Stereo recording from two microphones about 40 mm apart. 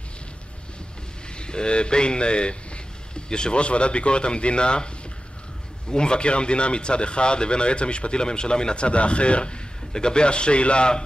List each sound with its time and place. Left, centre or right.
1.4 s speech: left
5.9 s speech: left